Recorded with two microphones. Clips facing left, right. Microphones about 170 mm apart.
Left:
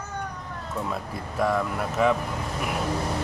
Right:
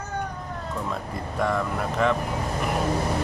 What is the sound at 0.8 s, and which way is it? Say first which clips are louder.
Speech: right 1 dB; 5° left (ahead or behind).